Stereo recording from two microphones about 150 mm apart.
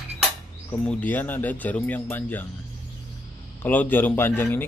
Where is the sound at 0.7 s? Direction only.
10° left (ahead or behind).